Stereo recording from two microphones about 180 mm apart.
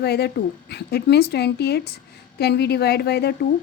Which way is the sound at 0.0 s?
65° left (ahead or behind).